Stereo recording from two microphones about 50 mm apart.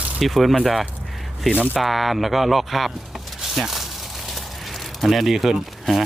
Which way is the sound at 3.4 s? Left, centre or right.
Centre.